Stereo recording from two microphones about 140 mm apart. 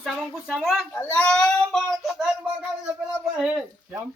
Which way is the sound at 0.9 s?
15° left (ahead or behind).